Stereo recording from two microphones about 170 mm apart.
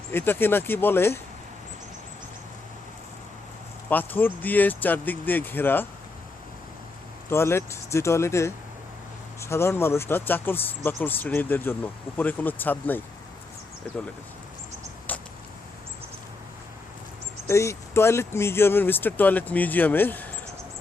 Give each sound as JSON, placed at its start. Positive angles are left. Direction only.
{"t": 0.1, "sound": "speech", "side_deg": 15}
{"t": 3.8, "sound": "speech", "side_deg": 10}
{"t": 7.3, "sound": "speech", "side_deg": 15}
{"t": 17.5, "sound": "speech", "side_deg": 15}